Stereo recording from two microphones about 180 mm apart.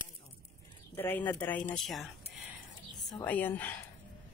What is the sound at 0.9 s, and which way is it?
Speech, 10° left (ahead or behind).